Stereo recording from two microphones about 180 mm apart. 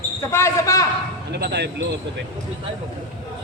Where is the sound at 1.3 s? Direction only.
65° right (ahead or behind).